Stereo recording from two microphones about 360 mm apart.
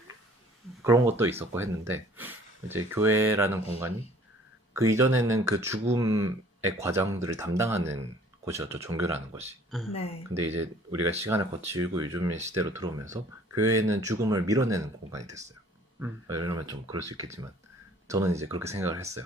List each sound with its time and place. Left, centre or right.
0.9 s speech: centre
9.9 s speech: centre
10.3 s speech: centre